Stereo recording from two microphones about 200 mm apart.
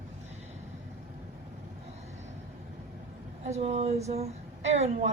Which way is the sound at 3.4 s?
30° right (ahead or behind).